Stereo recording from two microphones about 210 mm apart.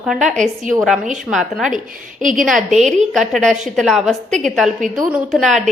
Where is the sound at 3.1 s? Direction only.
Centre (ahead or behind).